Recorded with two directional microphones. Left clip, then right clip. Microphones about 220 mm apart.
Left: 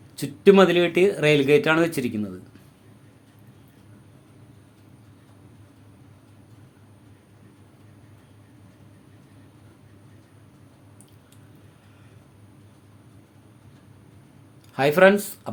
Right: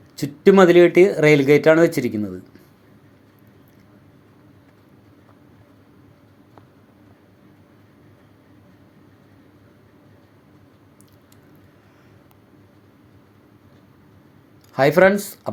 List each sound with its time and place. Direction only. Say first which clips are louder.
0.2 s speech: right 2 dB; 15° right (ahead or behind)
14.7 s speech: right 2 dB; 20° right (ahead or behind)